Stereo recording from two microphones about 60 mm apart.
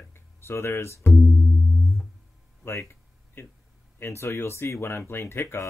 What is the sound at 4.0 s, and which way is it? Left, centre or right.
Speech, left.